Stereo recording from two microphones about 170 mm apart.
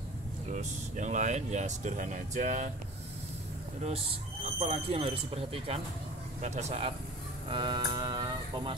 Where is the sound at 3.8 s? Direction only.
35° right (ahead or behind).